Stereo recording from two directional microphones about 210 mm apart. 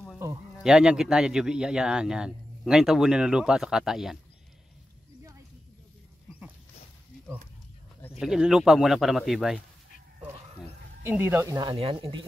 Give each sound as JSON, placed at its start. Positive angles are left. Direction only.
{"t": 0.6, "sound": "a man's voice", "side_deg": -5}
{"t": 8.2, "sound": "a man's voice", "side_deg": -5}
{"t": 11.1, "sound": "speech", "side_deg": -10}
{"t": 11.7, "sound": "speech", "side_deg": -25}